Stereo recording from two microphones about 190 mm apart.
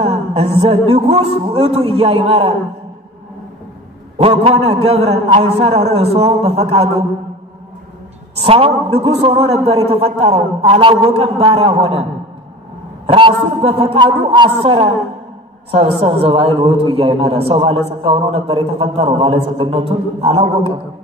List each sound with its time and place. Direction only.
0.0 s a man's voice: 35° right (ahead or behind)
4.2 s a man's voice: 30° right (ahead or behind)
8.4 s a man's voice: 30° right (ahead or behind)